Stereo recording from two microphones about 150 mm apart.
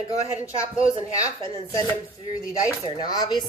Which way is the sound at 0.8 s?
40° right (ahead or behind).